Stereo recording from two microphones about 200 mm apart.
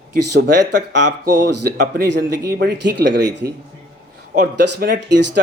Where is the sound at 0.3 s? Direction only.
60° right (ahead or behind).